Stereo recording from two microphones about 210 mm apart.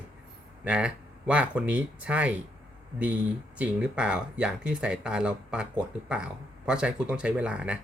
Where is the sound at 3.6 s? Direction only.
5° right (ahead or behind).